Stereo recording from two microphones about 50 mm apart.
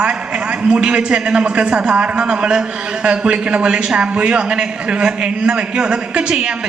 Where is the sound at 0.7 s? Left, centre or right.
Centre.